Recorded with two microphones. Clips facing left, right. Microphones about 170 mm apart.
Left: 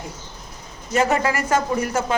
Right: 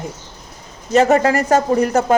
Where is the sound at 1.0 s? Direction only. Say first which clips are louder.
Right 5 dB; 40° right (ahead or behind).